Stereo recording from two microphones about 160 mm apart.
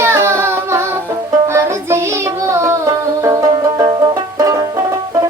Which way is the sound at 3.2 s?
20° right (ahead or behind).